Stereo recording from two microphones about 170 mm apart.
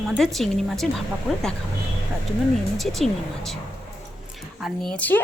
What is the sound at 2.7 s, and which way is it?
A woman's voice, centre (ahead or behind).